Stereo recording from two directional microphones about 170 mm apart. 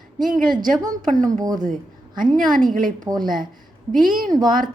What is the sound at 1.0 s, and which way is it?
A woman's voice, 50° right (ahead or behind).